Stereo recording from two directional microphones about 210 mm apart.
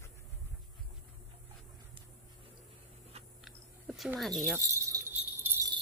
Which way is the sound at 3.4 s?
Centre (ahead or behind).